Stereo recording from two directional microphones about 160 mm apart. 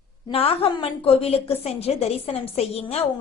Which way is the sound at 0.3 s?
35° left (ahead or behind).